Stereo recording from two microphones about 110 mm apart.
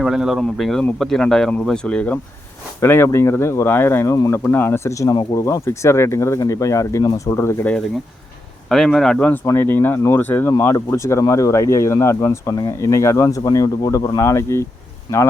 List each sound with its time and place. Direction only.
0.0 s speech: 5° right (ahead or behind)
2.8 s speech: 20° left (ahead or behind)
8.7 s speech: 5° left (ahead or behind); by 14.7 s 25° left (ahead or behind)